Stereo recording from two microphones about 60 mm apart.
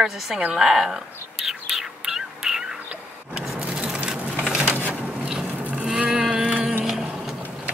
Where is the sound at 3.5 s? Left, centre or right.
Centre.